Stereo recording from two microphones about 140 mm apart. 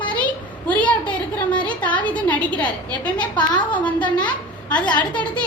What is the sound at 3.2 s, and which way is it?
Speech, 30° left (ahead or behind).